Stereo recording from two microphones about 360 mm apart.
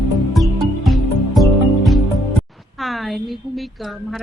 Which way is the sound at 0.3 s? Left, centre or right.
Centre.